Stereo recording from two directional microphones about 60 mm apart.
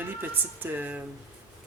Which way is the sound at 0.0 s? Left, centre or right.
Right.